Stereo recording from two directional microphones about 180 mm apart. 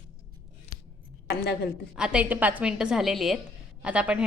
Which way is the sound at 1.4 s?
60° left (ahead or behind).